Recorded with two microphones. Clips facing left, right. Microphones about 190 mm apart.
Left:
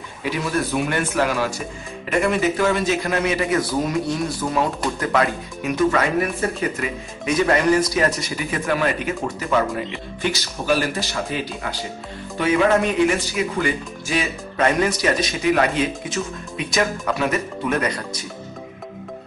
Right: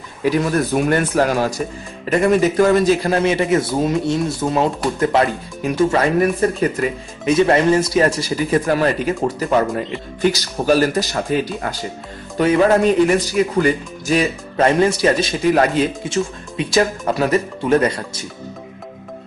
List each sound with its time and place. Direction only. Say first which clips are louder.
0.2 s speech: right 6 dB; 45° right (ahead or behind)
12.4 s speech: right 4 dB; 40° right (ahead or behind)
14.7 s speech: right 5 dB; 30° right (ahead or behind)